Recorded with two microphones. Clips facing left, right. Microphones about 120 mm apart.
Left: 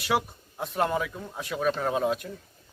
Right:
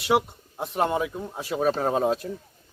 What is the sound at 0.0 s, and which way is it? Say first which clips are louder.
Speech: right 4 dB; 20° right (ahead or behind).